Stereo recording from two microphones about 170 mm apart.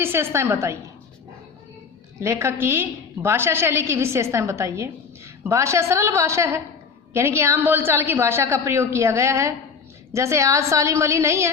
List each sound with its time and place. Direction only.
0.0 s a woman's voice: 15° right (ahead or behind)
2.2 s a woman's voice: 15° right (ahead or behind)